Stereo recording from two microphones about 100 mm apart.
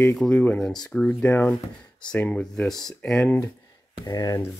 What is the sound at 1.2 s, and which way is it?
Speech, 20° left (ahead or behind).